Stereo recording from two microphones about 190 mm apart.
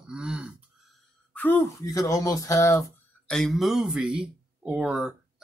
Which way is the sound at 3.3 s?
Centre (ahead or behind).